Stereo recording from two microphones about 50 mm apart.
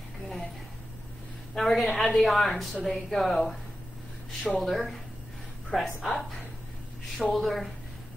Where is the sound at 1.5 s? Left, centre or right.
Centre.